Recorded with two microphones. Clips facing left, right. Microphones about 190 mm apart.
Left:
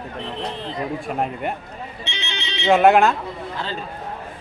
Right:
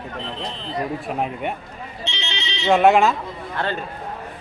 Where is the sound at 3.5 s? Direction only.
60° right (ahead or behind).